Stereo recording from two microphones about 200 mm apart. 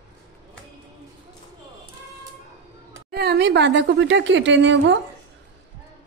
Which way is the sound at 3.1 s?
55° right (ahead or behind).